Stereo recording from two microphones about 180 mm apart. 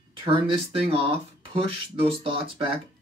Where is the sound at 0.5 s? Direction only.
30° right (ahead or behind).